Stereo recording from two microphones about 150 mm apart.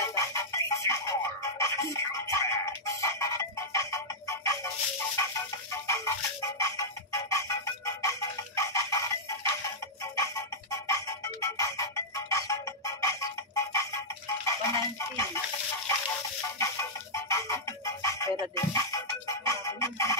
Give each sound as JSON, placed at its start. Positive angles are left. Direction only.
{"t": 0.1, "sound": "music", "side_deg": 20}
{"t": 5.9, "sound": "music", "side_deg": 20}
{"t": 16.5, "sound": "music", "side_deg": 20}